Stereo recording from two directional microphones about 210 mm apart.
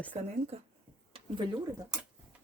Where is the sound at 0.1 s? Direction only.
35° right (ahead or behind).